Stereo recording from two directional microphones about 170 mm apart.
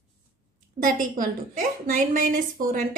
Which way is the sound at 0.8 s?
55° right (ahead or behind).